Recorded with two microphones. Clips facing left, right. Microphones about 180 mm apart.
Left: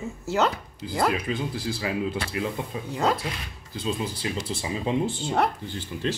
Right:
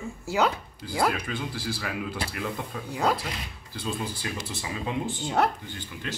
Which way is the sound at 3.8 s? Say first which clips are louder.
Left 3 dB; 25° left (ahead or behind).